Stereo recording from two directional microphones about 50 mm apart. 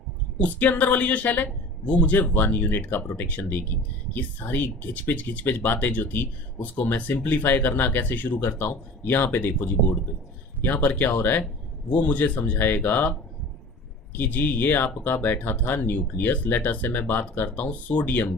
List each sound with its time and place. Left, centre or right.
0.3 s speech: left